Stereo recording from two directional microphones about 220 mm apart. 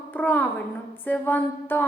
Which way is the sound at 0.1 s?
10° left (ahead or behind).